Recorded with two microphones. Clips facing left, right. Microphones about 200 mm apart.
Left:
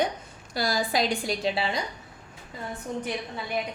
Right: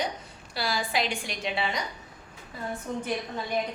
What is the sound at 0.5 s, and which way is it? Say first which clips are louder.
A woman's voice: left 3 dB; 40° left (ahead or behind).